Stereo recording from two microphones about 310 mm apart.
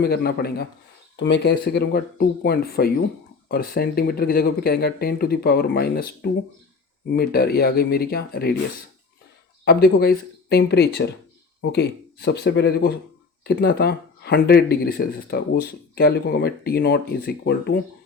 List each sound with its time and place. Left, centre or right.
0.0 s speech: left
9.6 s speech: left